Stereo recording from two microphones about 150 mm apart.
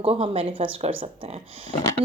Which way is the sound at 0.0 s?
40° right (ahead or behind).